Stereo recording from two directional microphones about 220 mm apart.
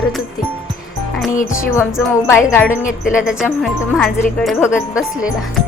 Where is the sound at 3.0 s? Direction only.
5° right (ahead or behind).